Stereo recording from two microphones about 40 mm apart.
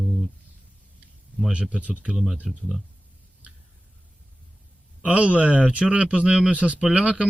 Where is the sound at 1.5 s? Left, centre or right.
Right.